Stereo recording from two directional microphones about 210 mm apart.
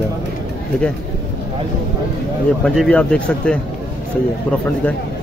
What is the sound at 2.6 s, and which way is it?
Speech, centre (ahead or behind).